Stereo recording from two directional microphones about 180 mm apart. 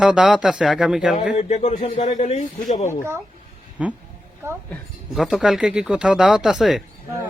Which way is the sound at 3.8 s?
5° right (ahead or behind).